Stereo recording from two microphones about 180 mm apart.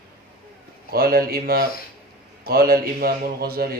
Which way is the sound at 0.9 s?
55° right (ahead or behind).